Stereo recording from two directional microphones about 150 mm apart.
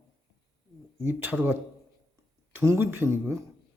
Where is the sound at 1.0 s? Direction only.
15° right (ahead or behind).